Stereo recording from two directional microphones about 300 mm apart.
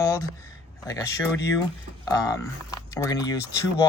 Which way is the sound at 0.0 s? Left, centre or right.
Centre.